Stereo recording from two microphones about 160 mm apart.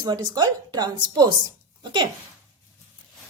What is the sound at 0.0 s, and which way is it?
Speech, 25° right (ahead or behind).